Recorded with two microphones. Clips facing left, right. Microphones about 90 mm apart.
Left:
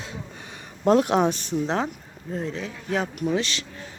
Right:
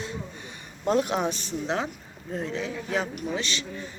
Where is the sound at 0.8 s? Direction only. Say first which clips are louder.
Left 5 dB; 65° left (ahead or behind).